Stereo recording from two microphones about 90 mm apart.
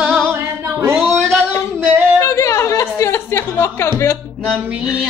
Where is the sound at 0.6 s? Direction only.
30° right (ahead or behind).